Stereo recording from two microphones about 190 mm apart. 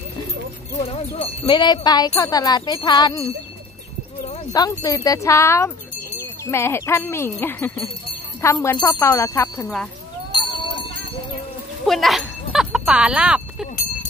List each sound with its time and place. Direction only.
0.7 s wind chime: 30° left (ahead or behind)
4.5 s speech: 20° left (ahead or behind)
11.8 s speech: centre (ahead or behind)
12.5 s music: 5° right (ahead or behind)